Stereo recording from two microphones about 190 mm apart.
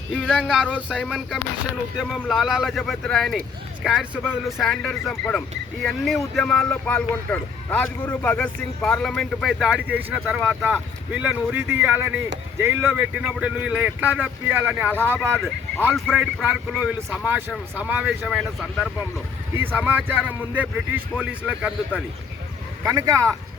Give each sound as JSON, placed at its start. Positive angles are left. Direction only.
{"t": 0.1, "sound": "speech", "side_deg": 5}
{"t": 22.8, "sound": "speech", "side_deg": -15}